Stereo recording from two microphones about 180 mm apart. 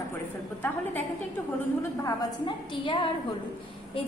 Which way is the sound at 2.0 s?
20° left (ahead or behind).